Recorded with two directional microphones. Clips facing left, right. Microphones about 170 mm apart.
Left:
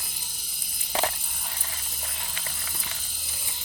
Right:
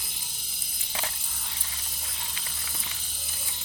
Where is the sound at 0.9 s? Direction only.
65° left (ahead or behind).